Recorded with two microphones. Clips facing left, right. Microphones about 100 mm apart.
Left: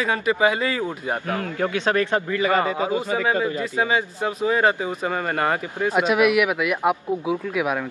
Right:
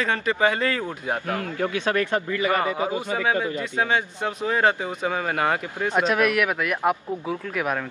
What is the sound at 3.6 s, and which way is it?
Speech, 5° left (ahead or behind).